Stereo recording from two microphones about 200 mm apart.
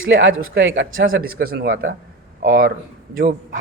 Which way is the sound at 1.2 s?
50° right (ahead or behind).